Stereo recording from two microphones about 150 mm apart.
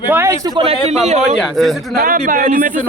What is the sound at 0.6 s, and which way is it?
Speech, 40° right (ahead or behind).